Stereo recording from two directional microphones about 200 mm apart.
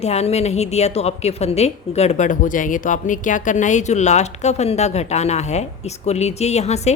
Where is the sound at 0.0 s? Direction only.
30° left (ahead or behind).